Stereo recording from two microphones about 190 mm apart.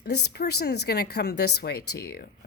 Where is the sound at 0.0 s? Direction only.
60° left (ahead or behind).